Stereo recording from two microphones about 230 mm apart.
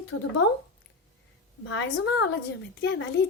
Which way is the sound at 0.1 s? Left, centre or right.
Left.